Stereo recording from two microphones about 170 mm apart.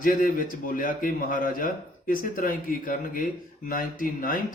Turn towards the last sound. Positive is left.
turn(degrees=55)  # may be behind; listen again after turning